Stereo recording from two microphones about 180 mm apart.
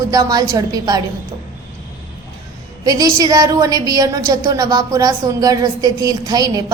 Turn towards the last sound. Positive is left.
turn(degrees=-20)  # may be behind; listen again after turning